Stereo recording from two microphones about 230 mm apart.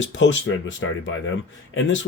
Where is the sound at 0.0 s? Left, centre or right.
Left.